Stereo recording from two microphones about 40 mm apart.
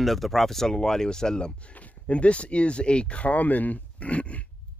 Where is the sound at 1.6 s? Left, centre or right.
Left.